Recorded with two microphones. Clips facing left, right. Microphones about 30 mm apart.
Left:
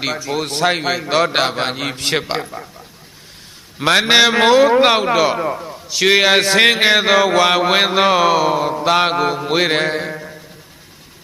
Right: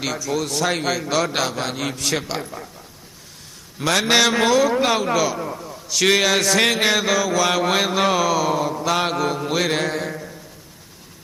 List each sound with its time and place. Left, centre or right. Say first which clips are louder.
0.0 s a man's voice: left 3 dB; left
0.7 s a man's voice: left 4 dB; left
3.8 s a man's voice: left 5 dB; left
4.8 s speech: left 6 dB; left
5.0 s a man's voice: left 5 dB; left
5.5 s a man's voice: left 2 dB; left
6.2 s a man's voice: left 5 dB; left
8.8 s a man's voice: left 6 dB; left
9.5 s mantra: left 6 dB; left